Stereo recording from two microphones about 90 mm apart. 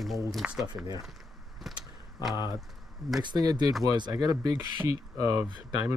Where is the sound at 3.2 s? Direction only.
50° right (ahead or behind).